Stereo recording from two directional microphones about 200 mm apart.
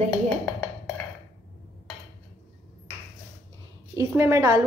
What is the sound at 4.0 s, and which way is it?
Speech, 15° right (ahead or behind).